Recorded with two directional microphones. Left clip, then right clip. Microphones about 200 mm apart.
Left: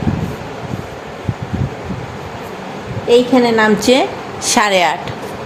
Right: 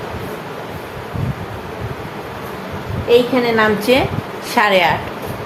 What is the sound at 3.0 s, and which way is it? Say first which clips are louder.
A woman's voice: left 2 dB; 35° left (ahead or behind).